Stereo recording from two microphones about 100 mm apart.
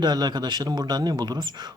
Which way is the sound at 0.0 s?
45° right (ahead or behind).